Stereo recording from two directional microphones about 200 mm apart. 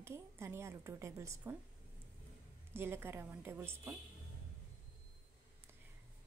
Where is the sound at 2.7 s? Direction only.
10° right (ahead or behind).